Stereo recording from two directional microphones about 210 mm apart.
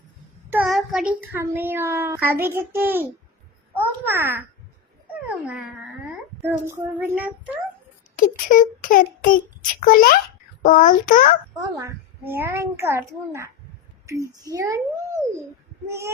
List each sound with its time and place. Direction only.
0.5 s a child's voice: centre (ahead or behind)
6.4 s a child's voice: 10° right (ahead or behind)
8.1 s a child's voice: 40° left (ahead or behind)
11.6 s a child's voice: 15° right (ahead or behind)
14.5 s a child's voice: 15° right (ahead or behind)